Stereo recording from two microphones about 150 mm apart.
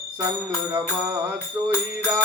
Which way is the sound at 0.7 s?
15° right (ahead or behind).